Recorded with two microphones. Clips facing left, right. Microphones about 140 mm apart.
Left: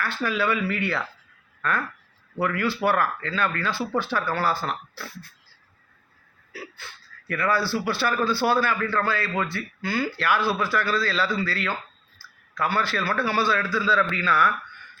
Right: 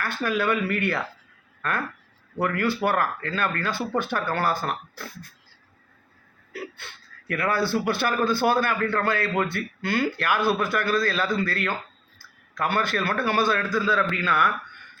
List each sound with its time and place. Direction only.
0.0 s speech: 50° right (ahead or behind)
2.4 s speech: 50° right (ahead or behind)
6.5 s speech: 55° right (ahead or behind)
13.8 s a man's voice: 15° right (ahead or behind)